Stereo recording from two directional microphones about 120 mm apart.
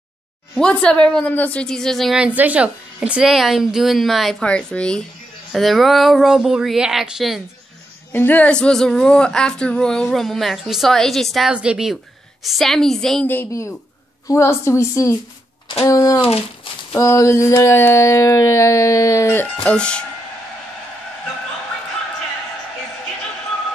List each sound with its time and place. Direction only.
0.6 s speech: 10° left (ahead or behind)
2.2 s speech: 10° right (ahead or behind)
8.1 s speech: 15° left (ahead or behind)
13.3 s a sound: 20° left (ahead or behind)